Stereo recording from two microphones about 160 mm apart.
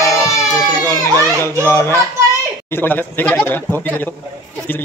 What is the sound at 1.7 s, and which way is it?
A man's voice, 15° left (ahead or behind).